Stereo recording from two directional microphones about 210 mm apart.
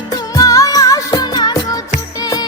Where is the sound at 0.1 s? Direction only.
15° left (ahead or behind).